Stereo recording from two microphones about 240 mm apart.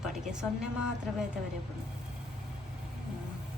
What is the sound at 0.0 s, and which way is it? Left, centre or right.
Speech, centre.